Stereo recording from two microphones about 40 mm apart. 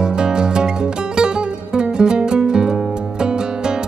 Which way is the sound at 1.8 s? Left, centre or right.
Right.